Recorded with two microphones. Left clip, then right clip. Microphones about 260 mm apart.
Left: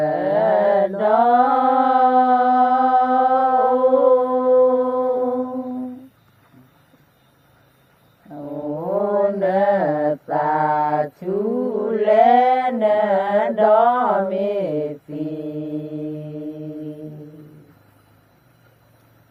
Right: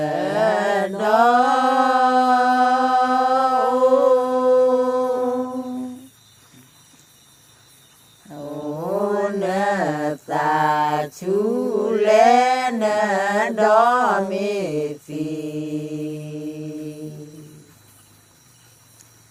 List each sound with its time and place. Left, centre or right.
0.0 s chant: right
8.3 s mantra: right